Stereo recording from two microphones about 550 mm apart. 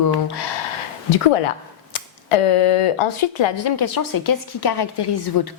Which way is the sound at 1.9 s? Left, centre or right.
Left.